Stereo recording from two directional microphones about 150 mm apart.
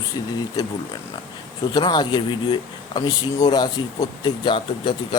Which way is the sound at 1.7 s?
30° left (ahead or behind).